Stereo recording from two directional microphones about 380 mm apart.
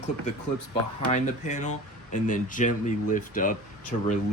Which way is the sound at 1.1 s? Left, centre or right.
Centre.